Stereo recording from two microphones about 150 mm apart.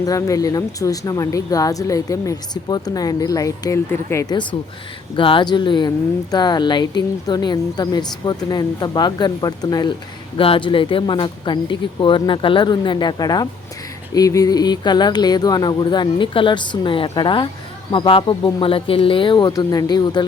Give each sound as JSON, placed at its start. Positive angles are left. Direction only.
{"t": 0.0, "sound": "speech", "side_deg": 25}
{"t": 5.1, "sound": "speech", "side_deg": 35}
{"t": 10.3, "sound": "speech", "side_deg": 35}